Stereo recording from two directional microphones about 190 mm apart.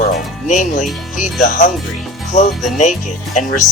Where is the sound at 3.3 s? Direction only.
40° left (ahead or behind).